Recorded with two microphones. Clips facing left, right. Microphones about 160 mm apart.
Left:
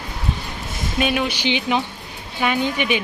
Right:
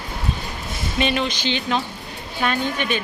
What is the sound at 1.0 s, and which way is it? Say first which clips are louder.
Speech: left 1 dB; 5° left (ahead or behind).